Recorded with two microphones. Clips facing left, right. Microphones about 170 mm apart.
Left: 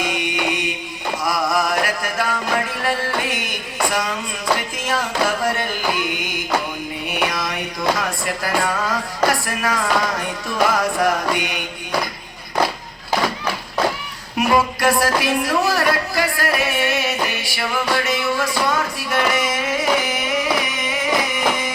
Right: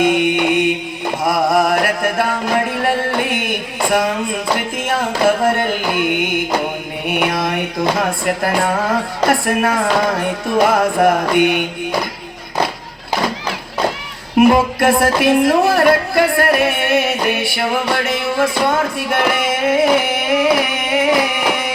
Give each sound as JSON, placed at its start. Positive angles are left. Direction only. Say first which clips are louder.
{"t": 0.0, "sound": "mantra", "louder": "right 9 dB", "side_deg": -55}
{"t": 1.2, "sound": "music", "louder": "right 6 dB", "side_deg": -55}
{"t": 14.3, "sound": "music", "louder": "right 7 dB", "side_deg": -55}